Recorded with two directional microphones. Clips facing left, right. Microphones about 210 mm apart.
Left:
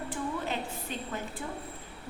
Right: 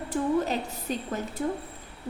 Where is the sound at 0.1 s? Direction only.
40° right (ahead or behind).